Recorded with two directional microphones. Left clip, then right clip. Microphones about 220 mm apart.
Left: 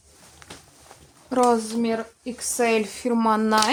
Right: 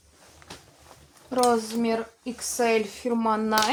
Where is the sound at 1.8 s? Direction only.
25° left (ahead or behind).